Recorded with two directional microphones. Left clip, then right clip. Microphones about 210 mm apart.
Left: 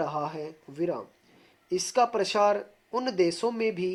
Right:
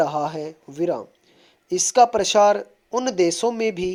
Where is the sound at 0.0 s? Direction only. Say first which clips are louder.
Right 8 dB; 35° right (ahead or behind).